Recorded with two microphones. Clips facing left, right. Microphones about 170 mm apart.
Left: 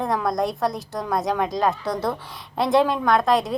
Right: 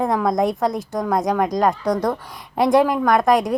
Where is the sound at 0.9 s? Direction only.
Centre (ahead or behind).